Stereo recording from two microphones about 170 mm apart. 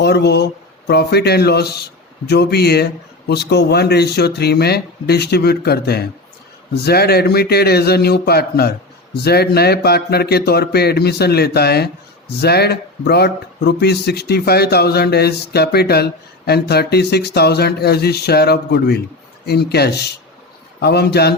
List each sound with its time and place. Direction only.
0.0 s a man's voice: 75° left (ahead or behind)